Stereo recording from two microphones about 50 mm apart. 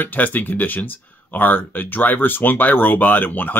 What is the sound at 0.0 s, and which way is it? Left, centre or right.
Speech, left.